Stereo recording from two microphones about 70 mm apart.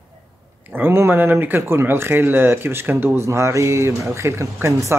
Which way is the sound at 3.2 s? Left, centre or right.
Right.